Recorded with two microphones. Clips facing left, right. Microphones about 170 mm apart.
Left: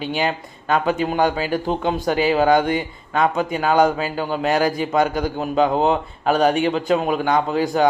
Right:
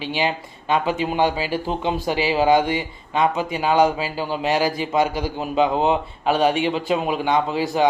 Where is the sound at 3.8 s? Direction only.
5° right (ahead or behind).